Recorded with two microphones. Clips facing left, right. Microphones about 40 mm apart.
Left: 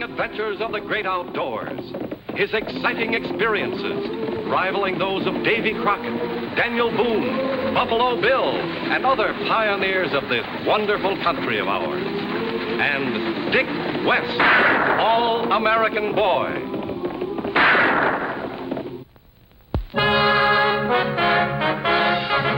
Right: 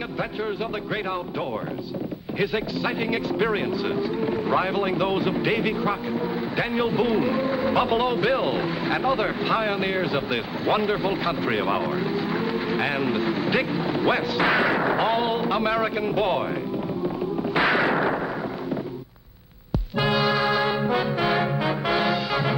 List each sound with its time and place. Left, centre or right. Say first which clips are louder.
2.3 s a man's voice: left 3 dB; left
17.6 s artillery fire: left 5 dB; left
20.0 s brass instrument: left 5 dB; left